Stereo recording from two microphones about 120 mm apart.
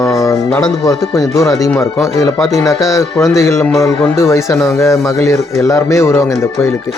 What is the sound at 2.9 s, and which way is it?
Speech, 25° left (ahead or behind).